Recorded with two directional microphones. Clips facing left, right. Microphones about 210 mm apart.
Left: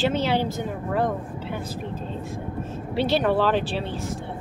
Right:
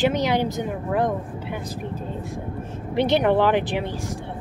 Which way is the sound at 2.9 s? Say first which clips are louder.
Right 3 dB; 15° right (ahead or behind).